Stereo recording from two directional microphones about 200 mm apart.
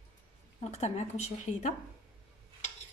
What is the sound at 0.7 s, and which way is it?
Speech, 35° left (ahead or behind).